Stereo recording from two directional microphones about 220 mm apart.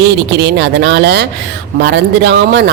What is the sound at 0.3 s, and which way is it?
Speech, 50° right (ahead or behind).